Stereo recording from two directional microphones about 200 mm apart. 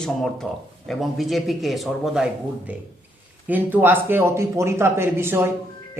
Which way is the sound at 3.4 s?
10° right (ahead or behind).